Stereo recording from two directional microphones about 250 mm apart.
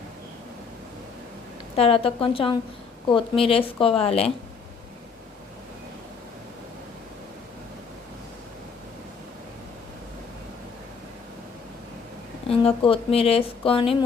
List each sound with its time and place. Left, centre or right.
1.7 s speech: left
12.5 s speech: left